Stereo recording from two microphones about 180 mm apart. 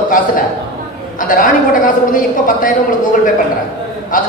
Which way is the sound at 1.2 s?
50° left (ahead or behind).